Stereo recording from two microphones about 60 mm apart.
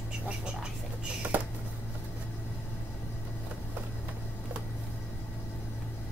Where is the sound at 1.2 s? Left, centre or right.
Right.